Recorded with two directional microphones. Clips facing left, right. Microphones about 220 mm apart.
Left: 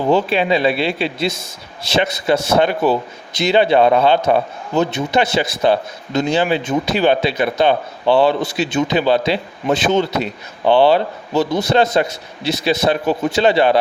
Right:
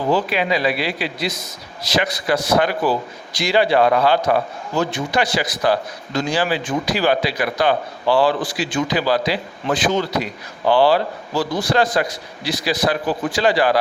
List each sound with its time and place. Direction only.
0.1 s a man's voice: 25° left (ahead or behind)